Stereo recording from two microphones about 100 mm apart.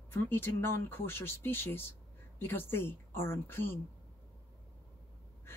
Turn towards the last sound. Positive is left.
turn(degrees=25)  # may be behind; listen again after turning